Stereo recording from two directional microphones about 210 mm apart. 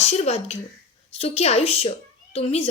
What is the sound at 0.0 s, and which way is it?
A woman's voice, 30° left (ahead or behind).